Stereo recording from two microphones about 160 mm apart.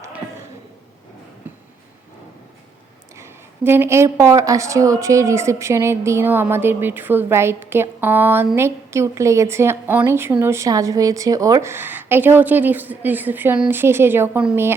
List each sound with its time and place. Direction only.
3.2 s a woman's voice: 15° right (ahead or behind)